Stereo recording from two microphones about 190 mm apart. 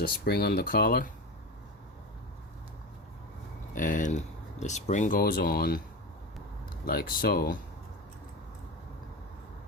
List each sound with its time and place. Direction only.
0.3 s speech: 55° left (ahead or behind)
3.8 s speech: 45° left (ahead or behind)
6.8 s speech: 50° left (ahead or behind)